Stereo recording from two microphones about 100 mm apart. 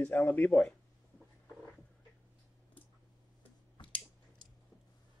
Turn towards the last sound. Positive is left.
turn(degrees=50)  # may be behind; listen again after turning